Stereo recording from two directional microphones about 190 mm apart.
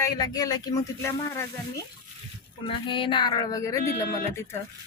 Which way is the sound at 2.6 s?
25° left (ahead or behind).